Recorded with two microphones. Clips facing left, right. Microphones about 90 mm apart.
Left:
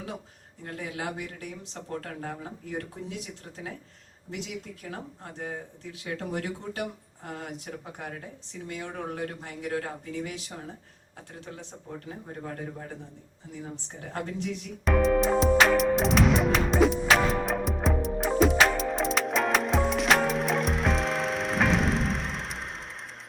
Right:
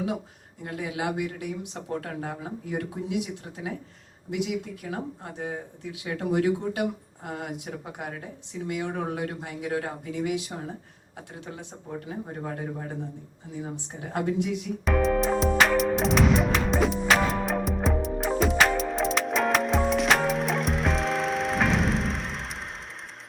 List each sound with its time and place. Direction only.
0.6 s speech: 15° right (ahead or behind)
4.3 s speech: 15° right (ahead or behind)
13.6 s speech: 15° right (ahead or behind)
14.8 s music: centre (ahead or behind)